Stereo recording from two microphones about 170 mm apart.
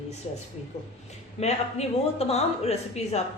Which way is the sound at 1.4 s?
40° left (ahead or behind).